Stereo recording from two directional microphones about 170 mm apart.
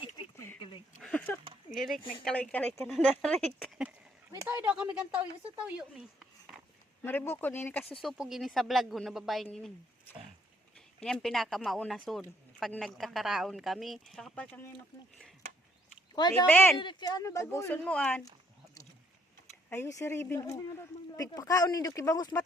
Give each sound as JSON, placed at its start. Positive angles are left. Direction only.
{"t": 1.0, "sound": "a sound", "side_deg": 5}
{"t": 1.7, "sound": "speech", "side_deg": 0}
{"t": 2.0, "sound": "speech", "side_deg": 30}
{"t": 2.2, "sound": "speech", "side_deg": 10}
{"t": 4.4, "sound": "speech", "side_deg": -10}
{"t": 7.0, "sound": "speech", "side_deg": 10}
{"t": 8.0, "sound": "speech", "side_deg": 0}
{"t": 11.0, "sound": "speech", "side_deg": 5}
{"t": 16.1, "sound": "speech", "side_deg": 25}
{"t": 16.5, "sound": "speech", "side_deg": 10}
{"t": 16.8, "sound": "speech", "side_deg": 25}
{"t": 19.7, "sound": "speech", "side_deg": 15}